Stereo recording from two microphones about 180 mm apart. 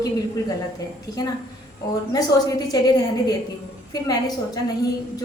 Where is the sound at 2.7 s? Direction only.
20° left (ahead or behind).